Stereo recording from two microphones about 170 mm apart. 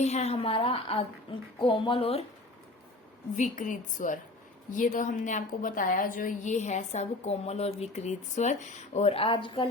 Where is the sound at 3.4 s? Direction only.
45° left (ahead or behind).